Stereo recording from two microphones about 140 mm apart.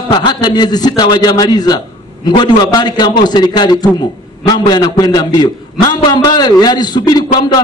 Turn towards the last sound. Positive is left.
turn(degrees=30)  # may be behind; listen again after turning